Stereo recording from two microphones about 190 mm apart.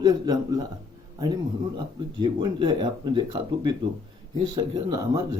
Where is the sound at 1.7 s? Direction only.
25° right (ahead or behind).